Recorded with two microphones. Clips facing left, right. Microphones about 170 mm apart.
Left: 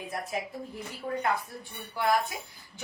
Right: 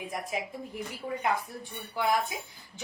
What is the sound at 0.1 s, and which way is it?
Speech, 15° right (ahead or behind).